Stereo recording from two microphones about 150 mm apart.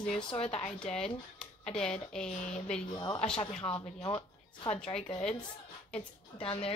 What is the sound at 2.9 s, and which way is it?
Speech, 25° left (ahead or behind).